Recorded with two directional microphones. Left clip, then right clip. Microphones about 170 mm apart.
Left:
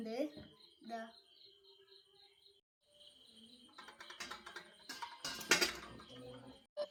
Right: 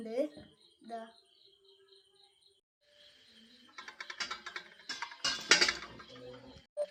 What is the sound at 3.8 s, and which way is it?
Music, 15° right (ahead or behind).